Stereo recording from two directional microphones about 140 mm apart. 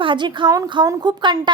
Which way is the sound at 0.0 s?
35° right (ahead or behind).